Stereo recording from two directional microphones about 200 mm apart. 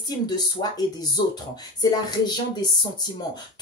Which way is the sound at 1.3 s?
20° left (ahead or behind).